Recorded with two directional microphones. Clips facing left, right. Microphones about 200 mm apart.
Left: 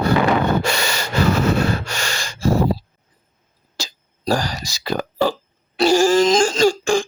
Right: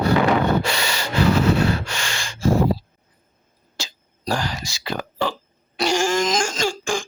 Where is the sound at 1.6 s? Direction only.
40° left (ahead or behind).